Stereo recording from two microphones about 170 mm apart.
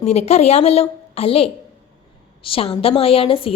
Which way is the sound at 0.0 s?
40° left (ahead or behind).